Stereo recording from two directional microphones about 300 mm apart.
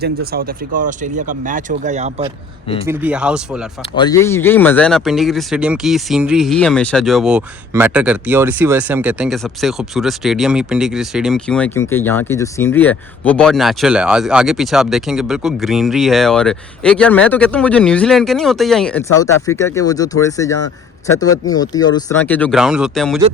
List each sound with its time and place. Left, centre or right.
0.0 s speech: right
2.8 s speech: centre
3.9 s speech: centre